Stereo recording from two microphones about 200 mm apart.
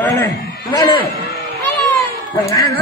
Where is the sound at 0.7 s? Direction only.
25° left (ahead or behind).